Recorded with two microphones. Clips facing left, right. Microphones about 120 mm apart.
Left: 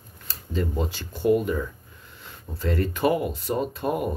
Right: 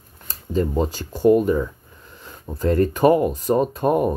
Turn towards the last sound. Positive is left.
turn(degrees=-45)  # may be behind; listen again after turning